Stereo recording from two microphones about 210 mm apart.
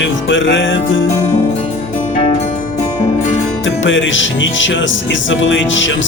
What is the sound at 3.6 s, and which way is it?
Music, 65° left (ahead or behind).